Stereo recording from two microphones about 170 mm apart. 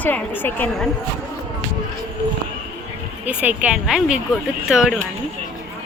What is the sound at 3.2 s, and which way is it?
A woman's voice, 10° right (ahead or behind).